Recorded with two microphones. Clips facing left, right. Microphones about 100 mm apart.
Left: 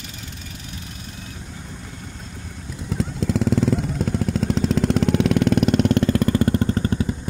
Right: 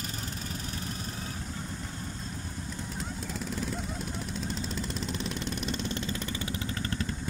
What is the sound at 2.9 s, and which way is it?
Vehicle, 90° left.